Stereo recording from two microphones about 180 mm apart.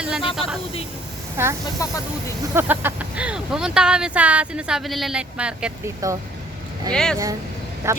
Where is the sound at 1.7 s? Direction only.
20° left (ahead or behind).